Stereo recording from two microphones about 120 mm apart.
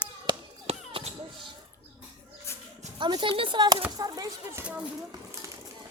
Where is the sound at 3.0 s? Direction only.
40° right (ahead or behind).